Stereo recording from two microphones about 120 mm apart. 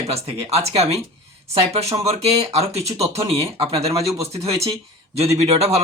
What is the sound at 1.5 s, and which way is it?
Speech, 60° right (ahead or behind).